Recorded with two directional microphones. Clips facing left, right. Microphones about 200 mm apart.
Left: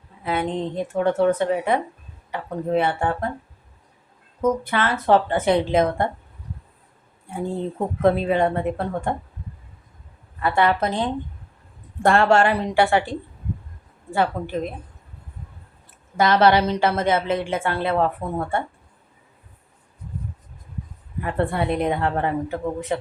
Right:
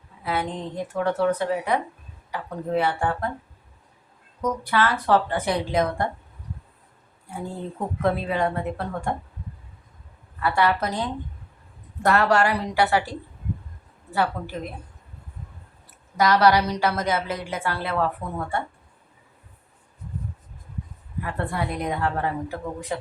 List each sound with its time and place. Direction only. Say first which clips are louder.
0.3 s a woman's voice: left 4 dB; 25° left (ahead or behind)
4.4 s a woman's voice: left 2 dB; 25° left (ahead or behind)
7.3 s a woman's voice: left 6 dB; 25° left (ahead or behind)
10.4 s a woman's voice: left 2 dB; 25° left (ahead or behind)
16.1 s a woman's voice: left 2 dB; 25° left (ahead or behind)
21.2 s a woman's voice: left 5 dB; 25° left (ahead or behind)